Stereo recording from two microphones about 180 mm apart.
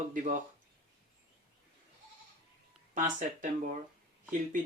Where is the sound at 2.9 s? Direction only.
45° right (ahead or behind).